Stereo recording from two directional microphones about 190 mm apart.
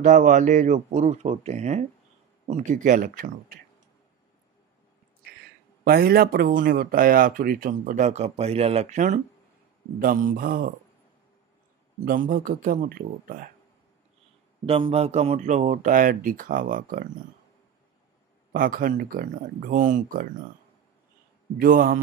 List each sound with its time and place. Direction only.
0.0 s speech: 40° right (ahead or behind)
5.9 s speech: 50° right (ahead or behind)
12.0 s speech: 45° right (ahead or behind)
14.7 s speech: 30° right (ahead or behind); by 17.1 s 45° right (ahead or behind)
18.5 s speech: 45° right (ahead or behind)
21.5 s speech: 45° right (ahead or behind)